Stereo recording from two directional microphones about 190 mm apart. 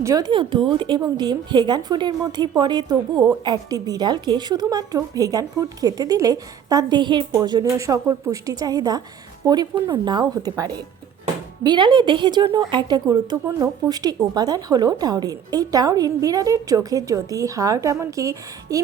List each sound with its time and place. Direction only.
0.0 s a woman's voice: 20° right (ahead or behind)